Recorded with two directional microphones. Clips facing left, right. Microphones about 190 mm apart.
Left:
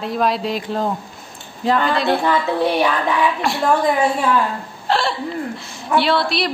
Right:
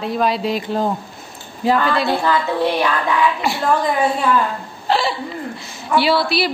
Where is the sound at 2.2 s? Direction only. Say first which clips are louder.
Even; 20° left (ahead or behind).